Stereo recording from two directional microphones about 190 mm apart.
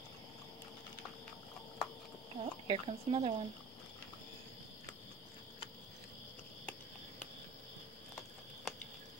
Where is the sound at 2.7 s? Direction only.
30° right (ahead or behind).